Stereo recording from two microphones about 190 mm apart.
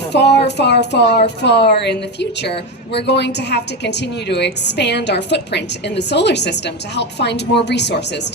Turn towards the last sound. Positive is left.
turn(degrees=65)  # may be behind; listen again after turning